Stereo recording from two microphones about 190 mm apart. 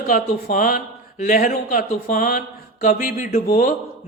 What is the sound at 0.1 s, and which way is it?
Speech, 50° left (ahead or behind).